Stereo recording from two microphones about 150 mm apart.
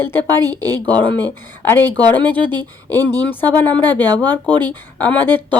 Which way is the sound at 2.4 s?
30° right (ahead or behind).